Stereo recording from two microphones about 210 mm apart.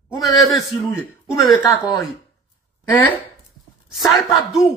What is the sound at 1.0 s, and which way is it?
A man's voice, 15° left (ahead or behind).